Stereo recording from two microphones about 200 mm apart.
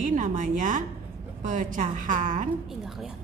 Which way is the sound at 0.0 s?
40° right (ahead or behind).